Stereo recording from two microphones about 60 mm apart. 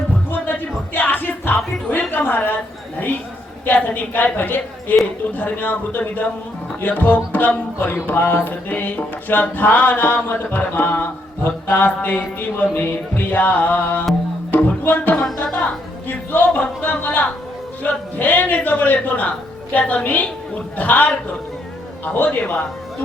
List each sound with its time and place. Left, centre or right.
0.3 s music: left
3.7 s music: left
7.3 s speech: left
8.0 s music: left
10.2 s mantra: left
12.0 s music: left
16.0 s mantra: left
17.8 s music: left
22.0 s mantra: left